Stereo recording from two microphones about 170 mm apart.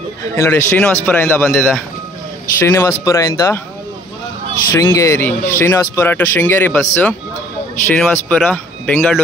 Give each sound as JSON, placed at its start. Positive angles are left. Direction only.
{"t": 0.4, "sound": "speech", "side_deg": 15}
{"t": 4.7, "sound": "speech", "side_deg": 20}